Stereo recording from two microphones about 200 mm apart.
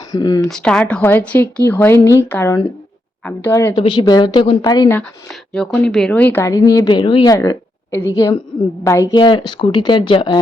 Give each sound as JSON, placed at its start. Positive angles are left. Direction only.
{"t": 0.1, "sound": "a woman's voice", "side_deg": 20}
{"t": 0.4, "sound": "speech", "side_deg": 5}
{"t": 3.8, "sound": "a woman's voice", "side_deg": 25}
{"t": 5.5, "sound": "speech", "side_deg": 0}